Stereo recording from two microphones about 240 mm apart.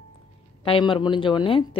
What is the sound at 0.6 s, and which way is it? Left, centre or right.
Speech, left.